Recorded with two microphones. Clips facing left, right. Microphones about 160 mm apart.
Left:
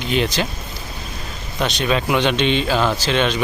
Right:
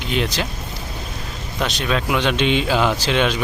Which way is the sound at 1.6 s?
Centre (ahead or behind).